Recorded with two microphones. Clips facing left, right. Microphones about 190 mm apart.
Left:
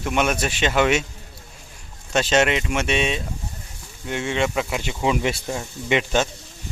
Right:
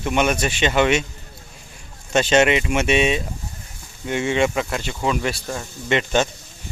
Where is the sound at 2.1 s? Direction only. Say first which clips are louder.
Right 3 dB; centre (ahead or behind).